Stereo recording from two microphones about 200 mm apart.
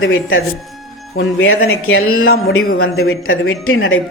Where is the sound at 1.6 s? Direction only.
90° left.